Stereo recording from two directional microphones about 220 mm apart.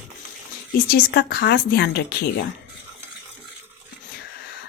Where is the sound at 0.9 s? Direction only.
45° left (ahead or behind).